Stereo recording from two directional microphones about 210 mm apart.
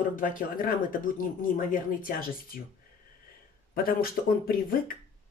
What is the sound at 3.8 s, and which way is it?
Speech, 45° left (ahead or behind).